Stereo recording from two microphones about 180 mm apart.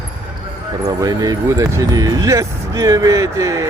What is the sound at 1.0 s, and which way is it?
Speech, 20° right (ahead or behind).